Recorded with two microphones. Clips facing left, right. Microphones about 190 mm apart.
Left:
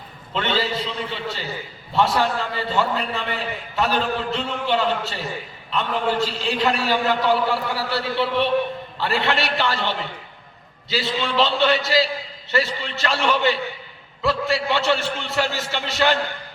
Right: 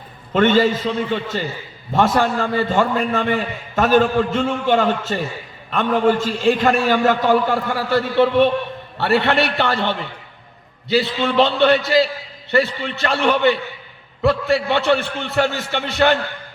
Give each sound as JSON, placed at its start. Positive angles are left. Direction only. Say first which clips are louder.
{"t": 0.3, "sound": "a man's voice", "louder": "right 9 dB", "side_deg": -50}
{"t": 9.0, "sound": "a man's voice", "louder": "right 6 dB", "side_deg": -65}